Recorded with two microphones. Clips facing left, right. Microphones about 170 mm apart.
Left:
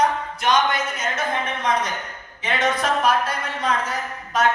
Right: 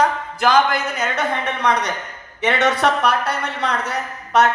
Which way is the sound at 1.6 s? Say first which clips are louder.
Right 4 dB; 70° right (ahead or behind).